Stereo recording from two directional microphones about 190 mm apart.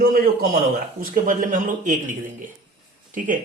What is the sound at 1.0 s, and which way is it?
A man's voice, 45° right (ahead or behind).